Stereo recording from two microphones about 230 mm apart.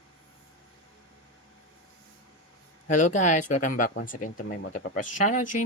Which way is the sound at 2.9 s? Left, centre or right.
Left.